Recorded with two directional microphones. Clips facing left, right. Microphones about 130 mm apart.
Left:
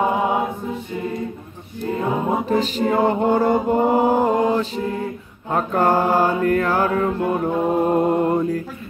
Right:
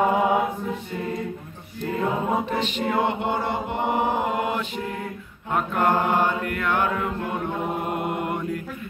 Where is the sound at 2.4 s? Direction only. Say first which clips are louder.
Left 6 dB; 40° left (ahead or behind).